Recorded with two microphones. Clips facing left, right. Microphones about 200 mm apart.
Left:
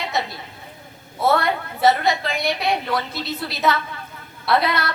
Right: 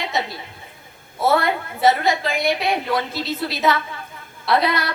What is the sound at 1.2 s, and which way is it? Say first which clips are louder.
A woman's voice: right 1 dB; centre (ahead or behind).